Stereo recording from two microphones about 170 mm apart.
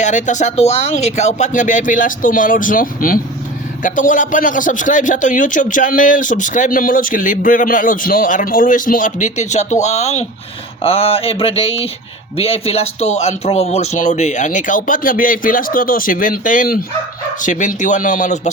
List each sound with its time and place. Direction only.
0.0 s a man's voice: 45° left (ahead or behind)